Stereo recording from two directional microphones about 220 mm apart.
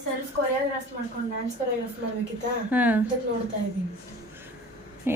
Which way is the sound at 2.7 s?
5° right (ahead or behind).